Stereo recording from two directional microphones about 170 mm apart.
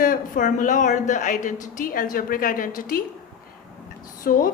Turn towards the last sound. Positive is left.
turn(degrees=55)  # may be behind; listen again after turning